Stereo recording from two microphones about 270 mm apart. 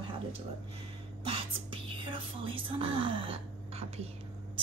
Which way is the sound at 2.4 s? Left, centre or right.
Centre.